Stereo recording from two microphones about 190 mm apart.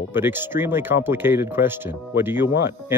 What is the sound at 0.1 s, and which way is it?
Speech, 10° right (ahead or behind).